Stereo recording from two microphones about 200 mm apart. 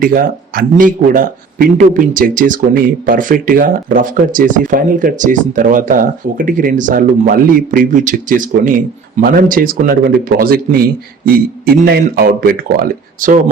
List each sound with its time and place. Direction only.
0.0 s a man's voice: 45° right (ahead or behind)